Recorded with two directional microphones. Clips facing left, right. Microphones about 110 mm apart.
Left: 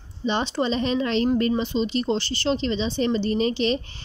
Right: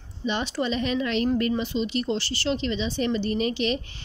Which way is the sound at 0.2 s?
30° left (ahead or behind).